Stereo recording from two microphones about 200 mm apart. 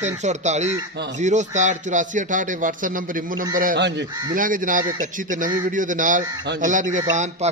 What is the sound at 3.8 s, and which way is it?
Speech, 60° right (ahead or behind).